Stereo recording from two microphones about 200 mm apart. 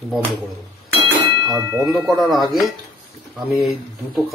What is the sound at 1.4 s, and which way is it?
Speech, 15° right (ahead or behind).